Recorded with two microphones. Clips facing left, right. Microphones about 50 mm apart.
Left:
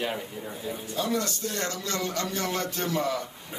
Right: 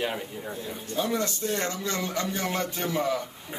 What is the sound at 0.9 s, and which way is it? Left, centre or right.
Speech, right.